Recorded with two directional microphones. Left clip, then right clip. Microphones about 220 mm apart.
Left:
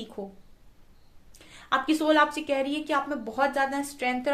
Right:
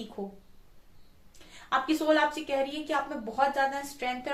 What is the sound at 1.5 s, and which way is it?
A woman's voice, 50° left (ahead or behind).